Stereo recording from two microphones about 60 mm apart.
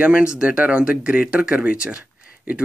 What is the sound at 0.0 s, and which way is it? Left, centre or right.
Speech, centre.